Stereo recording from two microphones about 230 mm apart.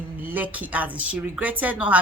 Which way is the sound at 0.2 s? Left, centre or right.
Centre.